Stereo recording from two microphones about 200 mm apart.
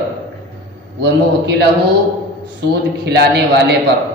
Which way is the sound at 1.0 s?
55° right (ahead or behind).